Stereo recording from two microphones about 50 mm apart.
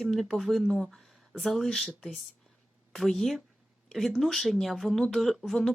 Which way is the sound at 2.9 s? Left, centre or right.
Centre.